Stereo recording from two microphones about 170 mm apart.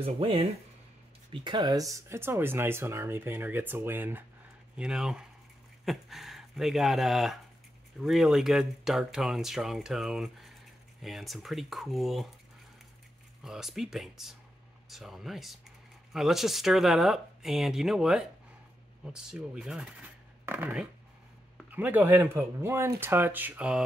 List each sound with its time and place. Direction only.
0.0 s speech: 35° right (ahead or behind); by 12.3 s centre (ahead or behind)
13.4 s speech: 5° right (ahead or behind)